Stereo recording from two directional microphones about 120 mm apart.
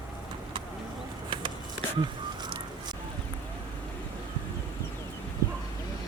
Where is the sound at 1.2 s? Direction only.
40° right (ahead or behind).